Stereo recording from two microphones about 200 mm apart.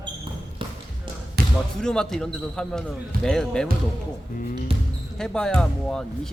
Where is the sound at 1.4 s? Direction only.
50° right (ahead or behind).